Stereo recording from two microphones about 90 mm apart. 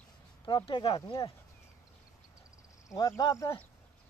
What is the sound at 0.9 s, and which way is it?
Speech, 45° left (ahead or behind).